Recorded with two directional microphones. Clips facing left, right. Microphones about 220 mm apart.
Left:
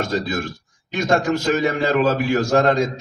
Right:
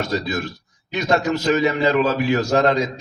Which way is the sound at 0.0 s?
50° left (ahead or behind).